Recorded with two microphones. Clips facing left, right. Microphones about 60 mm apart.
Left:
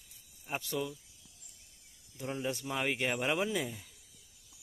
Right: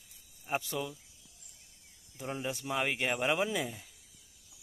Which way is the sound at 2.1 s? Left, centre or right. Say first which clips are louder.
Left 1 dB; centre.